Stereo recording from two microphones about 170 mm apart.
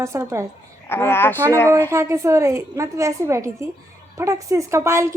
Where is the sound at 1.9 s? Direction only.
15° right (ahead or behind).